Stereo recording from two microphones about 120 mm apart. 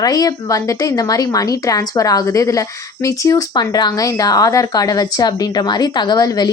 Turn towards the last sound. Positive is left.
turn(degrees=30)  # may be behind; listen again after turning